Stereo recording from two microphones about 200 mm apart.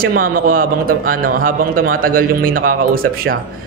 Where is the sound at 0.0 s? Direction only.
45° right (ahead or behind).